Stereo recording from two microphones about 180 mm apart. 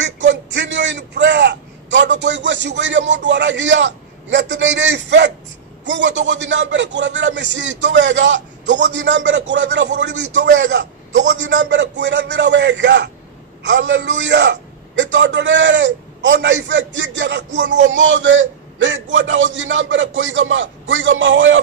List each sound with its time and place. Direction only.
0.0 s a sound: 85° right
5.9 s a man's voice: 80° right
17.9 s a man's voice: 90° right